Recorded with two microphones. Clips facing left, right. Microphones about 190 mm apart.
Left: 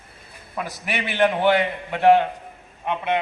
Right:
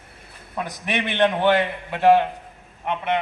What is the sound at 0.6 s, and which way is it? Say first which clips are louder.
A man's voice: right 2 dB; 5° left (ahead or behind).